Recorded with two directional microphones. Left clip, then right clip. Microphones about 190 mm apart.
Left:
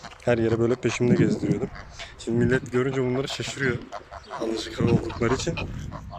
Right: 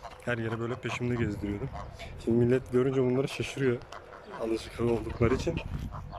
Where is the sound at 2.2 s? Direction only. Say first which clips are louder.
Left 2 dB; 10° right (ahead or behind).